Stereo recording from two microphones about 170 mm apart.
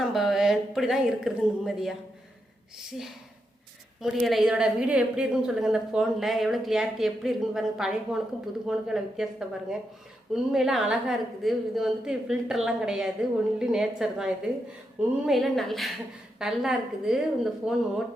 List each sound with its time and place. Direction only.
0.0 s a woman's voice: centre (ahead or behind)
4.0 s a woman's voice: centre (ahead or behind)